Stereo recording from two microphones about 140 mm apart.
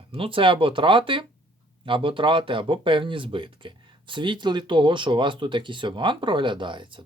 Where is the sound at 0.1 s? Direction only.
40° right (ahead or behind).